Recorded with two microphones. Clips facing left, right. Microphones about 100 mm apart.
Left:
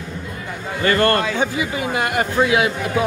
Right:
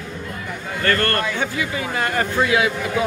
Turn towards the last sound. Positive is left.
turn(degrees=20)  # may be behind; listen again after turning